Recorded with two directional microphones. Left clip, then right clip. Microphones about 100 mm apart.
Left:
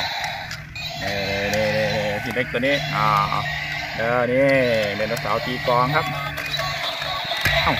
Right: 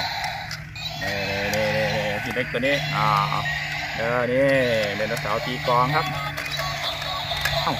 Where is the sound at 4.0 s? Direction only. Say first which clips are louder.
Left 3 dB; 20° left (ahead or behind).